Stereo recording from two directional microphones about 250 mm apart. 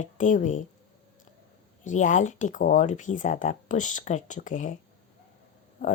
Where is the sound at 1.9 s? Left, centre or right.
Left.